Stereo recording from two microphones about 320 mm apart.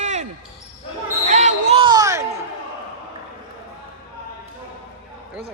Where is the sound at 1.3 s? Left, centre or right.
Right.